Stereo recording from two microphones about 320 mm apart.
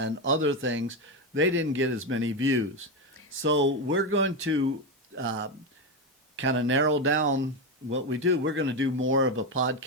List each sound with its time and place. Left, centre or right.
0.0 s speech: right